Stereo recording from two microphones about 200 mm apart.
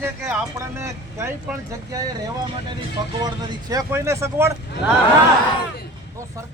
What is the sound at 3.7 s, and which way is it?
Speech, 15° right (ahead or behind).